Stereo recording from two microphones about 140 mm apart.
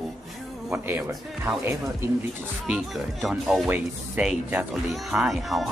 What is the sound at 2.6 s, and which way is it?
Speech, 5° right (ahead or behind).